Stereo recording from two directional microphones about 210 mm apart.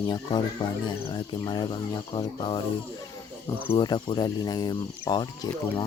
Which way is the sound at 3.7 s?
20° left (ahead or behind).